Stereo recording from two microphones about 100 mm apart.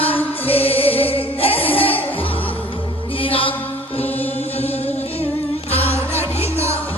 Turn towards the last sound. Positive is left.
turn(degrees=85)